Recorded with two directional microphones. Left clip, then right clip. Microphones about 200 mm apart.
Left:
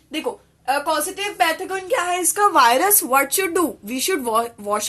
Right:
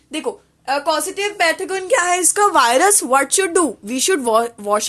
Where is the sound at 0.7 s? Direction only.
55° right (ahead or behind).